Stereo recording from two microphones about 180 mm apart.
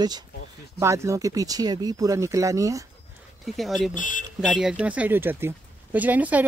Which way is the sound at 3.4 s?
Centre (ahead or behind).